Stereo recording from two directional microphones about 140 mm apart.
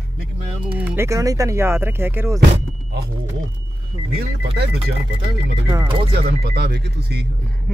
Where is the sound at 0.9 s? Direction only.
20° right (ahead or behind).